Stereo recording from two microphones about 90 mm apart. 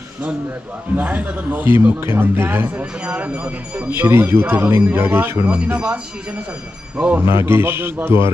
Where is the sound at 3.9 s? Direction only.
25° right (ahead or behind).